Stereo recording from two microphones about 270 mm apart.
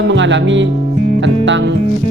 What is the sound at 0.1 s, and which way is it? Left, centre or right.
A man's voice, right.